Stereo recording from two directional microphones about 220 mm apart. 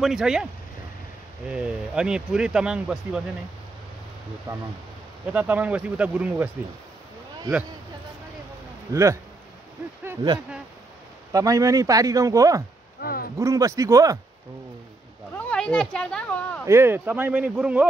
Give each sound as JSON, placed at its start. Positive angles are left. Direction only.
{"t": 0.0, "sound": "speech", "side_deg": 0}
{"t": 1.5, "sound": "speech", "side_deg": -5}
{"t": 5.3, "sound": "speech", "side_deg": -5}
{"t": 8.9, "sound": "speech", "side_deg": -15}
{"t": 13.0, "sound": "speech", "side_deg": 40}
{"t": 13.4, "sound": "speech", "side_deg": -15}
{"t": 15.3, "sound": "a sound", "side_deg": 5}
{"t": 16.6, "sound": "speech", "side_deg": -10}